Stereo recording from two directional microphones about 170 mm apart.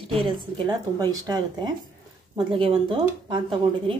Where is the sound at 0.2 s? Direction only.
25° right (ahead or behind).